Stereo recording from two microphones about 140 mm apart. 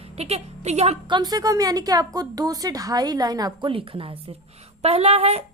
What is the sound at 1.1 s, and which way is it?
A woman's voice, 30° right (ahead or behind).